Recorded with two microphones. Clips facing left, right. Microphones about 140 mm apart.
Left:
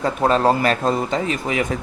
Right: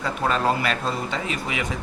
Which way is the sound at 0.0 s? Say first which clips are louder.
Left 6 dB; 35° left (ahead or behind).